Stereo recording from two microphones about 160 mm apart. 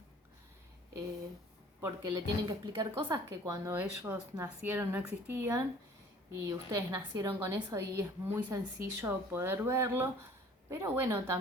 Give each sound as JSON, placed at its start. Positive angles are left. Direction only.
{"t": 1.8, "sound": "a woman's voice", "side_deg": -20}